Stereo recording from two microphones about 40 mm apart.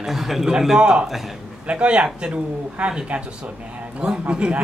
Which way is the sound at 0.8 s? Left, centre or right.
Right.